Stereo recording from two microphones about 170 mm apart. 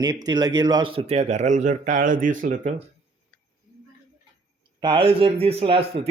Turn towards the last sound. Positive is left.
turn(degrees=-35)  # may be behind; listen again after turning